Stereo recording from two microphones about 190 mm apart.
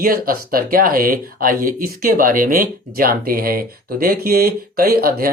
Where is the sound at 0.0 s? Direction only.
50° right (ahead or behind).